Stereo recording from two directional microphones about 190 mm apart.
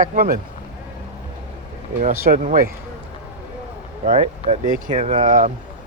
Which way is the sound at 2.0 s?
45° right (ahead or behind).